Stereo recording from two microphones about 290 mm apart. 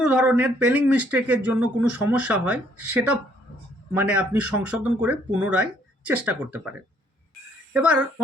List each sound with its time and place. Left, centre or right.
0.0 s speech: centre
7.7 s speech: centre